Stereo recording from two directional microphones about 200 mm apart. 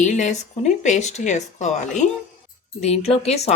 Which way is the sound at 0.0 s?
35° left (ahead or behind).